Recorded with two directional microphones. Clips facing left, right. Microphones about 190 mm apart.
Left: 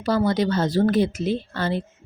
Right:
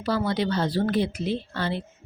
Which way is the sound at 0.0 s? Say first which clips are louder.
Left 4 dB; 45° left (ahead or behind).